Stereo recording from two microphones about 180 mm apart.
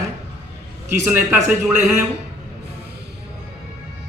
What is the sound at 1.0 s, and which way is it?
Speech, 10° right (ahead or behind).